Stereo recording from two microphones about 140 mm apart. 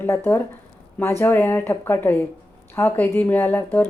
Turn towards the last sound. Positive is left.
turn(degrees=15)  # may be behind; listen again after turning